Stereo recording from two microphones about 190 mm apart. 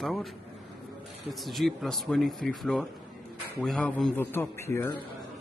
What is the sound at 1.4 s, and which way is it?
A man's voice, centre (ahead or behind).